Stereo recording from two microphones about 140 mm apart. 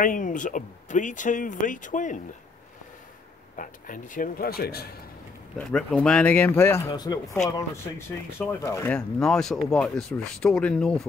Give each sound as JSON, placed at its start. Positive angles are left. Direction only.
{"t": 0.0, "sound": "speech", "side_deg": 70}
{"t": 3.5, "sound": "speech", "side_deg": 75}
{"t": 5.6, "sound": "speech", "side_deg": 5}
{"t": 7.0, "sound": "speech", "side_deg": 30}
{"t": 8.4, "sound": "speech", "side_deg": 20}
{"t": 8.9, "sound": "speech", "side_deg": 5}